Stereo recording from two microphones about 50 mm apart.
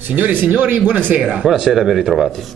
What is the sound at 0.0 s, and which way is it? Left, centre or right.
Speech, right.